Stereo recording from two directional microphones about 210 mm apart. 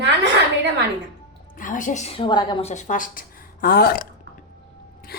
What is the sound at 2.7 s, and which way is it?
Speech, 35° left (ahead or behind).